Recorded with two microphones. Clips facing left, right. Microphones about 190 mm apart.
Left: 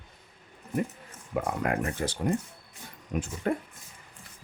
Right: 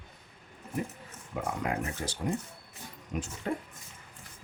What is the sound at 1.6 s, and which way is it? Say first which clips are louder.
Speech: left 4 dB; 60° left (ahead or behind).